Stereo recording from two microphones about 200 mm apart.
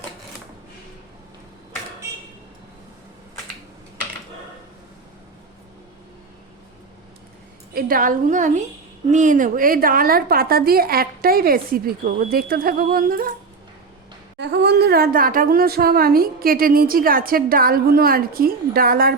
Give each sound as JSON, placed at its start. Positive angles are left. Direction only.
{"t": 7.7, "sound": "speech", "side_deg": -45}
{"t": 14.3, "sound": "speech", "side_deg": -60}